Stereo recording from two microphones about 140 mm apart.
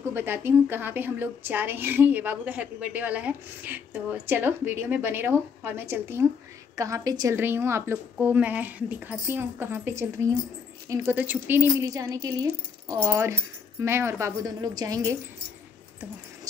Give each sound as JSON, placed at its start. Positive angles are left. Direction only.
{"t": 0.1, "sound": "a woman's voice", "side_deg": -15}